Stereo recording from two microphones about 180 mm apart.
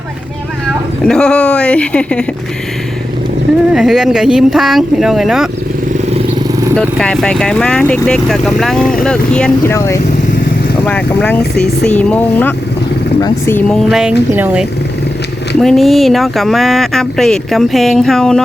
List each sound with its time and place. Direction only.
1.0 s speech: 5° left (ahead or behind)
3.7 s speech: 5° right (ahead or behind)
6.7 s speech: 5° left (ahead or behind)
9.7 s speech: 15° left (ahead or behind)